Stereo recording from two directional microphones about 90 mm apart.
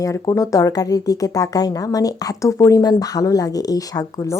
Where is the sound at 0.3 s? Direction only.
40° left (ahead or behind).